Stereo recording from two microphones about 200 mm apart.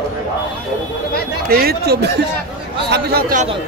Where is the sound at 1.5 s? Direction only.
50° right (ahead or behind).